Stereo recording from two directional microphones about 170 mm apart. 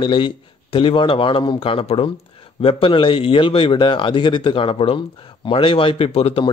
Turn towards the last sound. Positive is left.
turn(degrees=35)  # may be behind; listen again after turning